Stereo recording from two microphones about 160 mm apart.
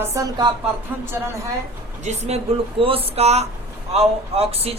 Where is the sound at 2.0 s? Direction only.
45° right (ahead or behind).